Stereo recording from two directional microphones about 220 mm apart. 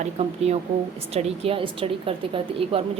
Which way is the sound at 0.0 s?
30° right (ahead or behind).